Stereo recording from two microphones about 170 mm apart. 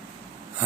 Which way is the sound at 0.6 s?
10° right (ahead or behind).